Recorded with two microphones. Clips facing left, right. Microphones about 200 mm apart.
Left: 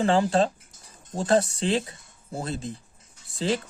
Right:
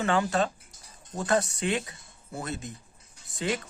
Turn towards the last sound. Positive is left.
turn(degrees=30)  # may be behind; listen again after turning